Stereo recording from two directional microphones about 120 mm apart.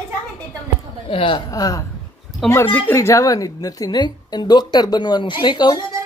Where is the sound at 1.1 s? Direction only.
45° left (ahead or behind).